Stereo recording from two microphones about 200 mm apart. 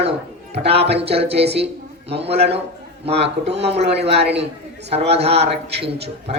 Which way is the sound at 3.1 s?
60° right (ahead or behind).